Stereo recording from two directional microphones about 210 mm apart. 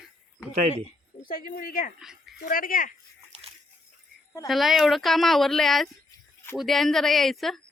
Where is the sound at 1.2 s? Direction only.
40° left (ahead or behind).